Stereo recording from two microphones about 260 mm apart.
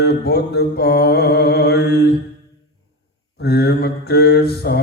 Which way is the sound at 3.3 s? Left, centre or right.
Left.